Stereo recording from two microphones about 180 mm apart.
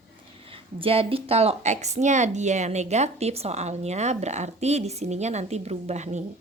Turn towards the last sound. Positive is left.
turn(degrees=-40)  # may be behind; listen again after turning